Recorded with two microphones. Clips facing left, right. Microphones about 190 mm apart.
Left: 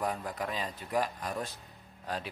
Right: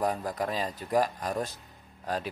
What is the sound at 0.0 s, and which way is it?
A man's voice, 40° right (ahead or behind).